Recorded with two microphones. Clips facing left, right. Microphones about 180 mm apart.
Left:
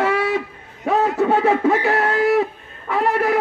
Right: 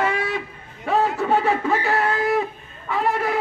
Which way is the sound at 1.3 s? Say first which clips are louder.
Left 3 dB; 65° left (ahead or behind).